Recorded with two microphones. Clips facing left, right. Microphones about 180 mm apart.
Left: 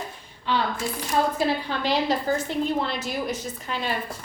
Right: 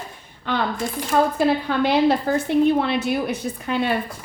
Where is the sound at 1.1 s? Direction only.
50° right (ahead or behind).